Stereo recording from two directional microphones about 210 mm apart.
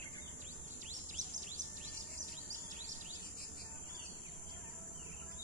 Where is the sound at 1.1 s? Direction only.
35° right (ahead or behind).